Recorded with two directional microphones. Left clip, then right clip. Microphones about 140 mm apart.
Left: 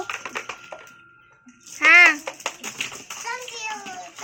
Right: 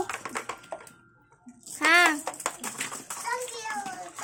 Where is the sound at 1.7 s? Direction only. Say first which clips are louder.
Left 8 dB; 10° right (ahead or behind).